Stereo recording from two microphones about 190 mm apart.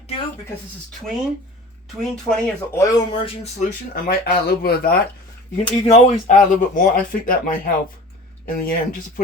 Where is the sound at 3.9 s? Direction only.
50° left (ahead or behind).